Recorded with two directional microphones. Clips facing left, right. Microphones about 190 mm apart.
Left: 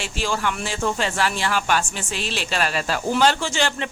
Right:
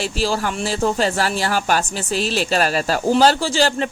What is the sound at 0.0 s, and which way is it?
Speech, 35° right (ahead or behind).